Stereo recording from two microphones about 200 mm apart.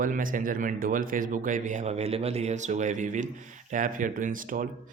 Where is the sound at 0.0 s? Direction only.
45° right (ahead or behind).